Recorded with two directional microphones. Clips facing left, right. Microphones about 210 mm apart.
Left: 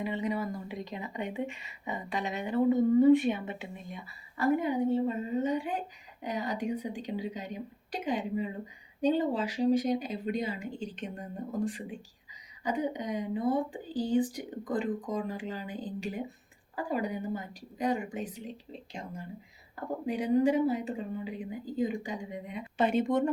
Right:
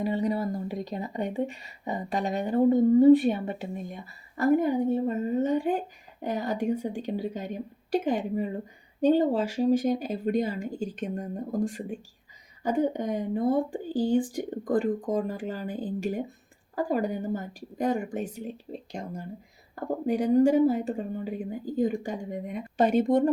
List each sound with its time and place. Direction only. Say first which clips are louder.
0.0 s speech: right 5 dB; 40° right (ahead or behind)
14.6 s speech: right 5 dB; 50° right (ahead or behind)